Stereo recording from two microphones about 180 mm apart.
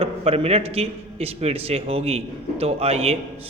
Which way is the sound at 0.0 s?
35° right (ahead or behind).